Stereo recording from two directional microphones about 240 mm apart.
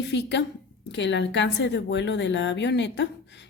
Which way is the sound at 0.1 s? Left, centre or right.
Left.